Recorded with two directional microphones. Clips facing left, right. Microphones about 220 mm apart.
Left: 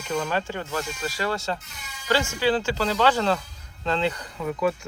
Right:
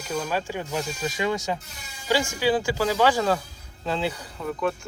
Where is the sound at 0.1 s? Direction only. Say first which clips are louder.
Left 1 dB; 5° right (ahead or behind).